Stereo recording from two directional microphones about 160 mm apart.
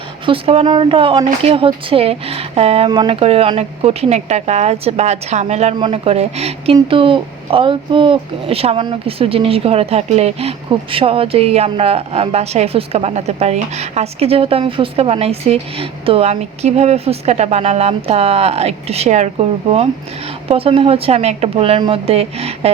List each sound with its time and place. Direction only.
0.3 s speech: 35° right (ahead or behind)